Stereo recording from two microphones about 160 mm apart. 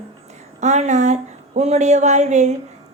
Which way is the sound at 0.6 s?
45° right (ahead or behind).